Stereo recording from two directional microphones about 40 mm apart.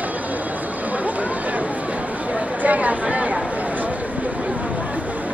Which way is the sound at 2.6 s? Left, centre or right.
Right.